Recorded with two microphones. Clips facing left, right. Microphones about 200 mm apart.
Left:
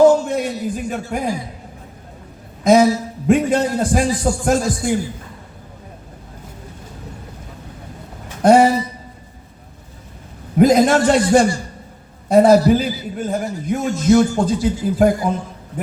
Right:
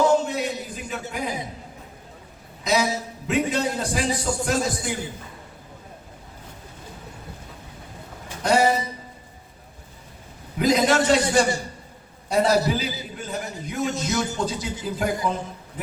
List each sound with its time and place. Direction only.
0.3 s a sound: 50° left (ahead or behind)
2.6 s a man's voice: 50° left (ahead or behind)
8.4 s a man's voice: 55° left (ahead or behind)
10.6 s a man's voice: 50° left (ahead or behind)